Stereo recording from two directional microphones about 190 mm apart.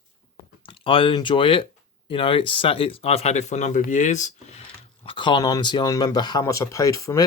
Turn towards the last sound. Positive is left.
turn(degrees=15)  # may be behind; listen again after turning